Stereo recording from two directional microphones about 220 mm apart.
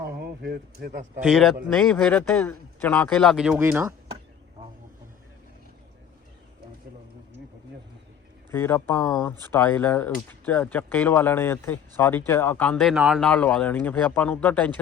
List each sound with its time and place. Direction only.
0.2 s speech: 45° right (ahead or behind)
1.2 s a man's voice: centre (ahead or behind)
8.4 s speech: 10° left (ahead or behind)